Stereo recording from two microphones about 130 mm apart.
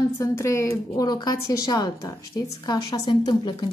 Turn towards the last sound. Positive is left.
turn(degrees=35)  # may be behind; listen again after turning